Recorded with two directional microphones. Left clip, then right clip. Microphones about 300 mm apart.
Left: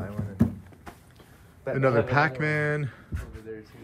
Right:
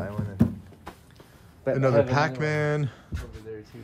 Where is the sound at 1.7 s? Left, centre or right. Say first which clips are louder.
Right 1 dB; centre.